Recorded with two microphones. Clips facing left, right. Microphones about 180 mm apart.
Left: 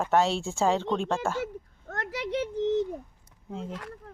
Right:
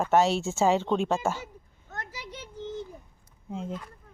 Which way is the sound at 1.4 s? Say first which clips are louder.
Left 10 dB; 70° left (ahead or behind).